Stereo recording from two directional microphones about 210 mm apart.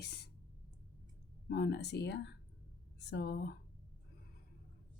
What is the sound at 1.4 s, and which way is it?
Speech, 50° left (ahead or behind).